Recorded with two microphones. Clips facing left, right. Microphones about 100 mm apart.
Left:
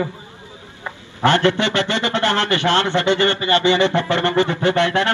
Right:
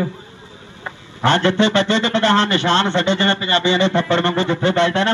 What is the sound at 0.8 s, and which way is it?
A man's voice, 20° right (ahead or behind).